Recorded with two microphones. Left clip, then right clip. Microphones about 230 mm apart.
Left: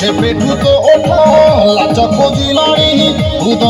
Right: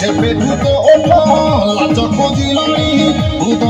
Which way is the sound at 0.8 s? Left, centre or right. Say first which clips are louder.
Right 2 dB; left.